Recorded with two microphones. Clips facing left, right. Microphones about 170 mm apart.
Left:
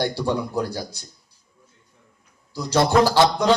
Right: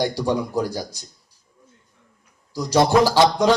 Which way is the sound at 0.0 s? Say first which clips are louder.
Right 2 dB; 15° right (ahead or behind).